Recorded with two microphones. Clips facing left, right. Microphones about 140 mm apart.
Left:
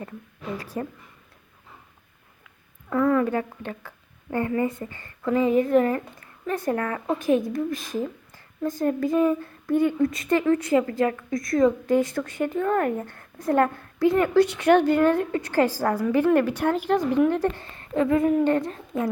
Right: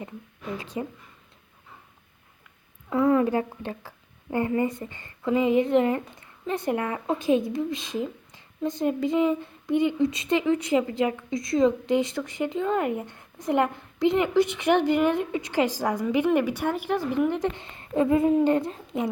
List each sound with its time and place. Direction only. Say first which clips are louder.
0.5 s speech: left 1 dB; 20° right (ahead or behind)
2.9 s a woman's voice: even; 25° right (ahead or behind)